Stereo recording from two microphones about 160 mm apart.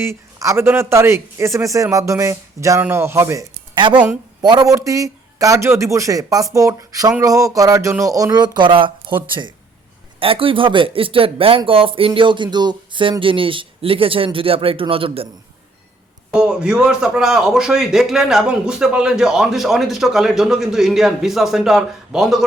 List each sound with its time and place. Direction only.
0.0 s a man's voice: 15° right (ahead or behind)
3.8 s a man's voice: 30° right (ahead or behind)
4.0 s a woman's voice: 10° right (ahead or behind)
4.4 s a man's voice: 25° right (ahead or behind)
16.3 s a man's voice: 5° right (ahead or behind)